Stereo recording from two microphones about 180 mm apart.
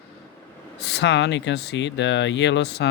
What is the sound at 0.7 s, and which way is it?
Speech, 70° left (ahead or behind).